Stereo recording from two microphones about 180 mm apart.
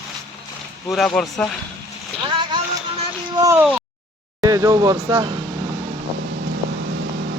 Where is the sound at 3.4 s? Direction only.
10° right (ahead or behind).